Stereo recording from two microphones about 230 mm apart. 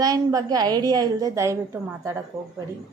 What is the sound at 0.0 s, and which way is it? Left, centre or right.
A woman's voice, centre.